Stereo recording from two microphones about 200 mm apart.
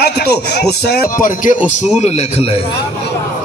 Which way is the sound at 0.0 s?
55° left (ahead or behind).